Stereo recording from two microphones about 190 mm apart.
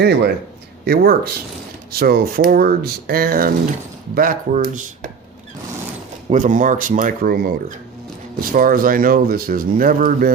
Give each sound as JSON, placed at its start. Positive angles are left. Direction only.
{"t": 0.0, "sound": "a man's voice", "side_deg": -60}
{"t": 6.3, "sound": "speech", "side_deg": -45}
{"t": 8.5, "sound": "speech", "side_deg": -45}